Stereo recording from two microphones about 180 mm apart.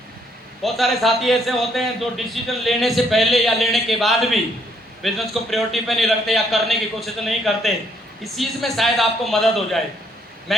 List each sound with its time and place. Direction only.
0.6 s a man's voice: centre (ahead or behind)